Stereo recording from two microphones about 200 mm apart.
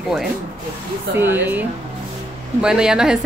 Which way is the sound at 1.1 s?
10° right (ahead or behind).